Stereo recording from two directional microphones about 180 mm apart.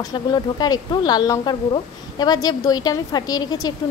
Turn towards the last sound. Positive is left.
turn(degrees=20)  # may be behind; listen again after turning